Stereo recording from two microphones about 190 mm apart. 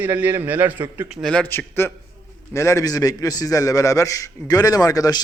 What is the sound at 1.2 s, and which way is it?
A man's voice, 5° left (ahead or behind).